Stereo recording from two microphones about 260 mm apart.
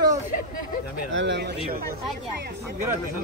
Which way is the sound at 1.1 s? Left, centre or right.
Right.